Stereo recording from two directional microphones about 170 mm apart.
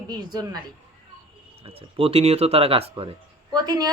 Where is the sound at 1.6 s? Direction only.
35° right (ahead or behind).